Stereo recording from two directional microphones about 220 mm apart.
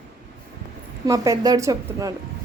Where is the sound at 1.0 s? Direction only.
15° right (ahead or behind).